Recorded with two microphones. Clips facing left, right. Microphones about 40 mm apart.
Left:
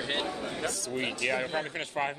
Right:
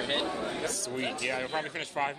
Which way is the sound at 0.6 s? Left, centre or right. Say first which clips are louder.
Left 1 dB; centre.